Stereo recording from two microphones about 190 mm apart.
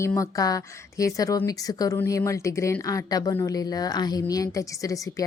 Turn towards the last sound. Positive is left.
turn(degrees=15)  # may be behind; listen again after turning